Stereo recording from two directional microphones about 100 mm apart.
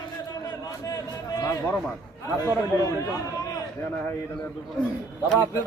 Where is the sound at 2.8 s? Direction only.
35° left (ahead or behind).